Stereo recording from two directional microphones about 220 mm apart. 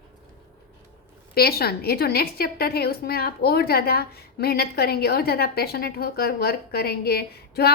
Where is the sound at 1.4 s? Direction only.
45° left (ahead or behind).